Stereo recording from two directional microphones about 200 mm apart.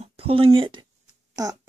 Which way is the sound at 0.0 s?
30° right (ahead or behind).